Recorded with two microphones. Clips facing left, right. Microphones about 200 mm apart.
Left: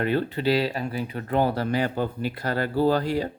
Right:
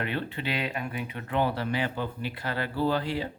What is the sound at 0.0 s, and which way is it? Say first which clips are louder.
Speech: left 8 dB; 40° left (ahead or behind).